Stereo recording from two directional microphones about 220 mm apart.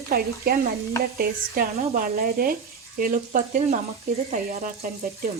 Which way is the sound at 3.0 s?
40° right (ahead or behind).